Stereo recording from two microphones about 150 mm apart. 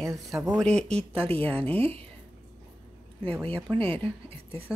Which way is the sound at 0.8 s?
45° right (ahead or behind).